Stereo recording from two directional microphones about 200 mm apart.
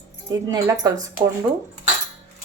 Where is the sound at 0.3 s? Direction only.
20° right (ahead or behind).